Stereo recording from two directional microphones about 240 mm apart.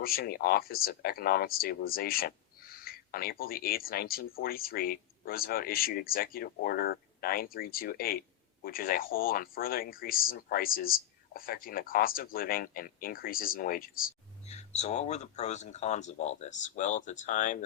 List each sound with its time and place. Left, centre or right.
0.0 s speech: left